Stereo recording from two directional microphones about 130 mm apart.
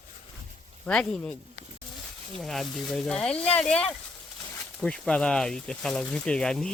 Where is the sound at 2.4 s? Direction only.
Centre (ahead or behind).